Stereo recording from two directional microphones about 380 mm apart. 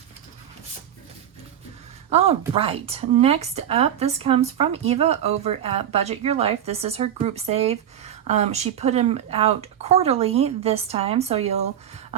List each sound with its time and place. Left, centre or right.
2.0 s a woman's voice: centre